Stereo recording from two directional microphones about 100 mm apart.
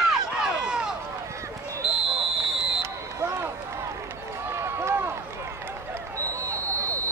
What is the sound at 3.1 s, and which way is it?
Run, 25° right (ahead or behind).